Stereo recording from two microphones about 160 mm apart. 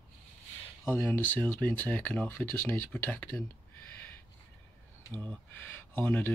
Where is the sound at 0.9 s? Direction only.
10° left (ahead or behind).